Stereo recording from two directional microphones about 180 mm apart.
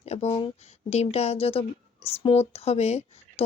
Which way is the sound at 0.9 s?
35° left (ahead or behind).